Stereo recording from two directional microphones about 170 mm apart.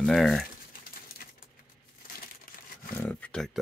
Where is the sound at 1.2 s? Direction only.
60° left (ahead or behind).